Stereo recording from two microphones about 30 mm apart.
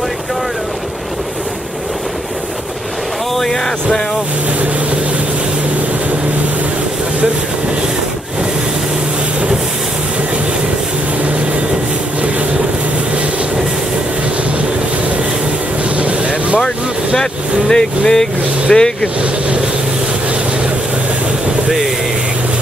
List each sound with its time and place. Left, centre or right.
3.4 s a sound: centre
16.0 s vehicle: right
17.2 s speech: left